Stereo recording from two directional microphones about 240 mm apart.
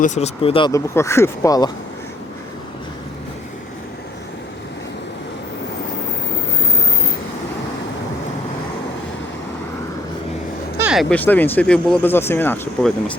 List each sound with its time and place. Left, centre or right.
0.0 s speech: left
10.8 s a sound: centre
11.1 s speech: centre